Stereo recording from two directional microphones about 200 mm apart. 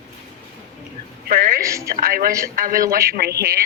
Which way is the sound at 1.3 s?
40° right (ahead or behind).